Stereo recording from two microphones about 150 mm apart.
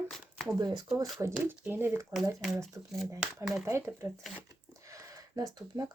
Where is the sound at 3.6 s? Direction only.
15° right (ahead or behind).